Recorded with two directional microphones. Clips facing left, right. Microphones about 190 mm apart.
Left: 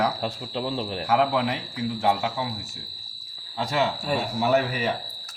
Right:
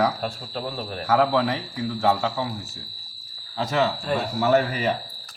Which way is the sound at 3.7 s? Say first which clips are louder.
Right 2 dB; 10° left (ahead or behind).